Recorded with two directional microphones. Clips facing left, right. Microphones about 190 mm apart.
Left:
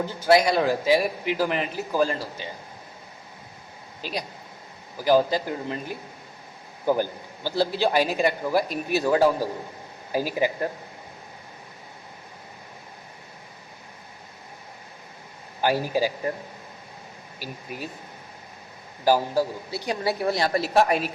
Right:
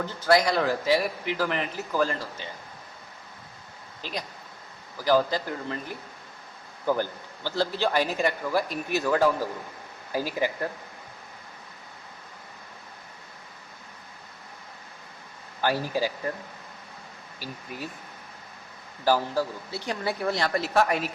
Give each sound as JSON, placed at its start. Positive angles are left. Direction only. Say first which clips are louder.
{"t": 0.0, "sound": "a man's voice", "louder": "left 3 dB", "side_deg": 10}
{"t": 4.0, "sound": "a man's voice", "louder": "left 3 dB", "side_deg": 10}
{"t": 15.6, "sound": "a man's voice", "louder": "left 3 dB", "side_deg": 15}
{"t": 17.4, "sound": "a man's voice", "louder": "left 2 dB", "side_deg": 15}
{"t": 19.0, "sound": "a man's voice", "louder": "left 3 dB", "side_deg": 15}